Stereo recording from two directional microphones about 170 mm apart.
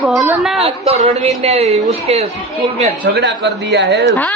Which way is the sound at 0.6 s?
35° right (ahead or behind).